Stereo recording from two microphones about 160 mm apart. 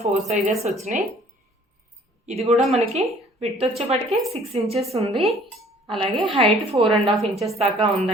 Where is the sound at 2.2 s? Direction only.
45° right (ahead or behind).